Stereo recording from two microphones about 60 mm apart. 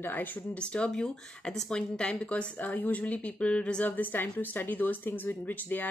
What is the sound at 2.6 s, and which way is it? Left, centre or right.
A woman's voice, left.